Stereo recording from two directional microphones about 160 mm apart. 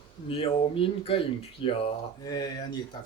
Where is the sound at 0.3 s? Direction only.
35° left (ahead or behind).